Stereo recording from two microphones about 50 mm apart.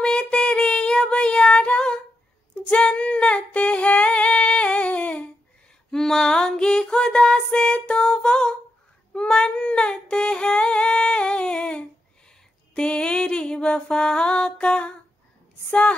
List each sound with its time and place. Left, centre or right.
0.0 s child singing: centre
2.5 s female singing: centre
5.9 s music: centre
9.1 s singing: centre
12.7 s music: centre